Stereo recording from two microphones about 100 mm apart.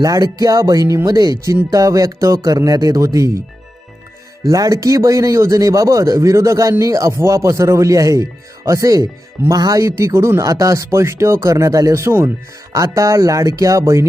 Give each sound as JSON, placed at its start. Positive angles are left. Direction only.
{"t": 0.0, "sound": "speech", "side_deg": -40}
{"t": 4.4, "sound": "speech", "side_deg": -35}